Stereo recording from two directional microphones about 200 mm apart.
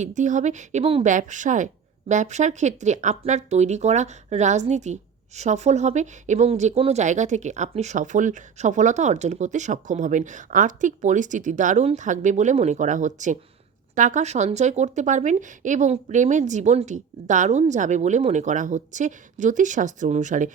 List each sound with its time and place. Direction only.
0.0 s speech: 40° right (ahead or behind)